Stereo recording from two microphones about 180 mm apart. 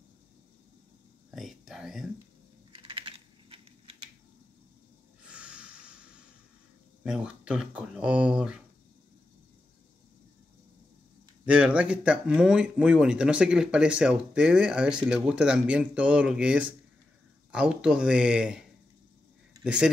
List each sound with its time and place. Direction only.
1.3 s whispering: centre (ahead or behind)
2.7 s typing: 30° right (ahead or behind)
5.2 s a sound: 5° right (ahead or behind)
7.0 s speech: 5° right (ahead or behind)
11.4 s speech: 5° right (ahead or behind)